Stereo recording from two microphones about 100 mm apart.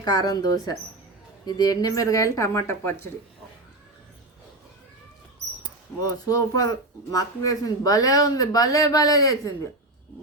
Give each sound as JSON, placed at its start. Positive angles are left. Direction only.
{"t": 0.0, "sound": "speech", "side_deg": 40}
{"t": 6.0, "sound": "speech", "side_deg": 40}